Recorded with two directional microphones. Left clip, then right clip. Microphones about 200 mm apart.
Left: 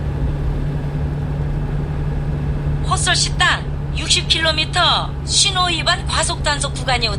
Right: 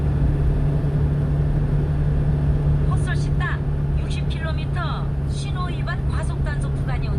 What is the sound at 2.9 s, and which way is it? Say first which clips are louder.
Speech: left 12 dB; 55° left (ahead or behind).